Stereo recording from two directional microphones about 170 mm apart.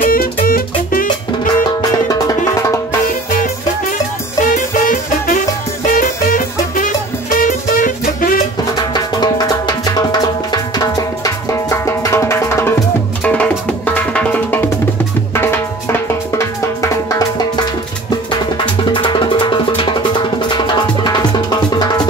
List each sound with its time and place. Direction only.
0.0 s music: 60° left (ahead or behind)
1.8 s music: 20° left (ahead or behind)
3.1 s music: 50° left (ahead or behind)
8.7 s music: 25° left (ahead or behind)
18.9 s music: 25° left (ahead or behind)